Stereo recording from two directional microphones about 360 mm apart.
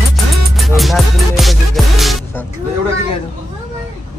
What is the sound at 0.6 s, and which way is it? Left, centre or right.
Music, centre.